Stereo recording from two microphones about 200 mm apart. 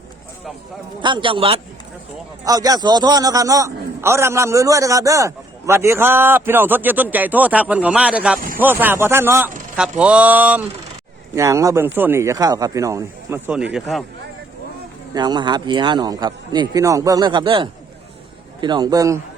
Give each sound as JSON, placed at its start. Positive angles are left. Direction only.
{"t": 1.0, "sound": "a man's voice", "side_deg": -25}
{"t": 13.5, "sound": "speech", "side_deg": -5}
{"t": 15.1, "sound": "speech", "side_deg": -20}